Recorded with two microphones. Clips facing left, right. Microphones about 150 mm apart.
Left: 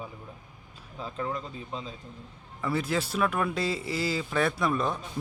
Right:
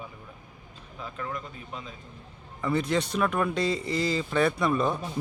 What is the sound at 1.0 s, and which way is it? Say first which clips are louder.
Speech: left 2 dB; 30° left (ahead or behind).